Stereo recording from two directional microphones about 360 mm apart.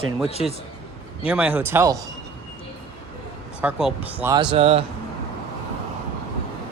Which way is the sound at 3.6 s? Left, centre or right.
Centre.